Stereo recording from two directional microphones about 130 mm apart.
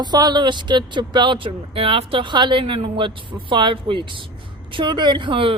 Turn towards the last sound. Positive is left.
turn(degrees=-40)  # may be behind; listen again after turning